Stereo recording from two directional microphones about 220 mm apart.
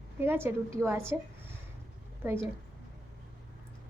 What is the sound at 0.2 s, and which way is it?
A woman's voice, 10° right (ahead or behind).